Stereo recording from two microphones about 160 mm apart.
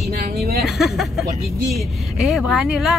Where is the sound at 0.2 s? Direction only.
75° right (ahead or behind).